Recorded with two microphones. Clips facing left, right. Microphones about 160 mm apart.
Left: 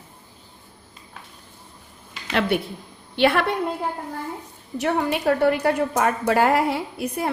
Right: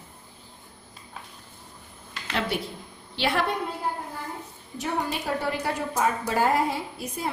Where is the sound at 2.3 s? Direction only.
70° left (ahead or behind).